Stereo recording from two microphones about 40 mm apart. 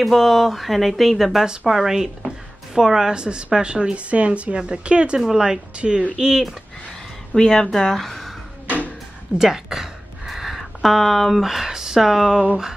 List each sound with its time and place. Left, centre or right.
0.0 s a woman's voice: centre; by 4.0 s right
4.1 s a woman's voice: right
5.2 s speech: centre
5.8 s a woman's voice: right
6.1 s speech: centre
7.3 s speech: centre
8.6 s a sound: left
9.4 s a sound: centre
11.7 s speech: centre